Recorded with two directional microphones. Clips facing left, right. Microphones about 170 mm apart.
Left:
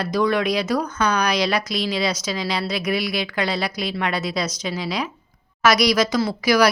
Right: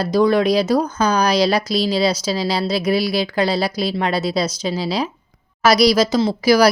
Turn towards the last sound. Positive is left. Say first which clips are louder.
# right 4 dB
turn(degrees=-30)  # may be behind; listen again after turning